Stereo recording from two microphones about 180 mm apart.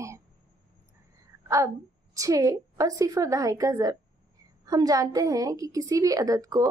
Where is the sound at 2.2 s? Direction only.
20° right (ahead or behind).